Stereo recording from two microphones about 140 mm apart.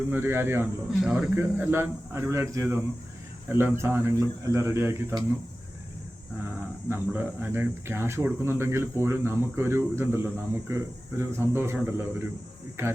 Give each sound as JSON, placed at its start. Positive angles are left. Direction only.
{"t": 0.1, "sound": "speech", "side_deg": -15}
{"t": 0.9, "sound": "speech", "side_deg": -5}
{"t": 1.4, "sound": "speech", "side_deg": -15}
{"t": 6.8, "sound": "speech", "side_deg": -15}